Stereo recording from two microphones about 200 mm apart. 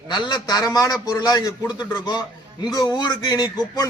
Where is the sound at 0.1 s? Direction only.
20° left (ahead or behind).